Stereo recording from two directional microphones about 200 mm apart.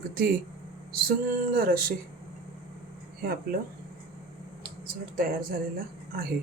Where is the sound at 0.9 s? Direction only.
50° right (ahead or behind).